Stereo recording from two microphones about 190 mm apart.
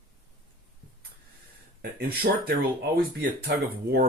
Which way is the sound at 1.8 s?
55° right (ahead or behind).